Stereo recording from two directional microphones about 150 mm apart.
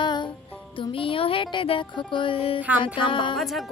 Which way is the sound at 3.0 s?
35° left (ahead or behind).